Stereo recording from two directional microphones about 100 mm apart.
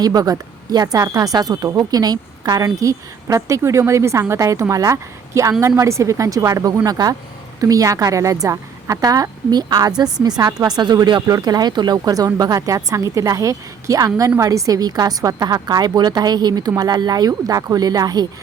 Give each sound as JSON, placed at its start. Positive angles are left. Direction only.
{"t": 0.0, "sound": "speech", "side_deg": -40}